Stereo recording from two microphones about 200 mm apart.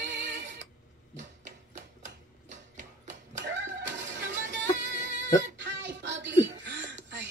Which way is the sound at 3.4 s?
65° right (ahead or behind).